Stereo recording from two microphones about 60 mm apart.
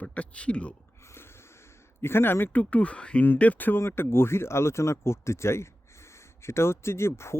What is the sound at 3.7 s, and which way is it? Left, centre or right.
Speech, left.